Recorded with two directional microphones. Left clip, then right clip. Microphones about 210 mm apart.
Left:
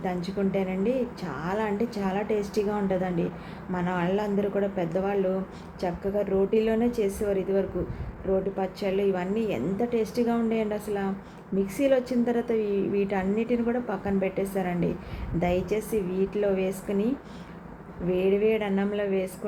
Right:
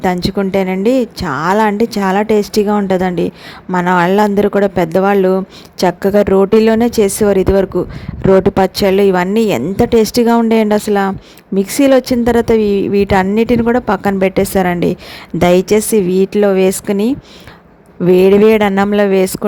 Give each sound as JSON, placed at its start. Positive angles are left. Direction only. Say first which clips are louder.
{"t": 0.0, "sound": "a woman's voice", "louder": "right 14 dB", "side_deg": -55}
{"t": 18.1, "sound": "speech", "louder": "right 16 dB", "side_deg": -55}